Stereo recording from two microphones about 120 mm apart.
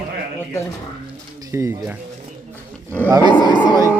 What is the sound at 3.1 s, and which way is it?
Speech, 35° right (ahead or behind).